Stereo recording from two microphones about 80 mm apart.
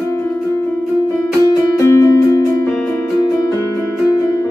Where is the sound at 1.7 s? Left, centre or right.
Left.